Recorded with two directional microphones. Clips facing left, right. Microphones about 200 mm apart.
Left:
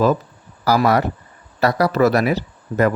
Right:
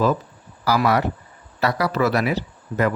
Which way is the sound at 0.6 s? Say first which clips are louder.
Left 3 dB; 40° left (ahead or behind).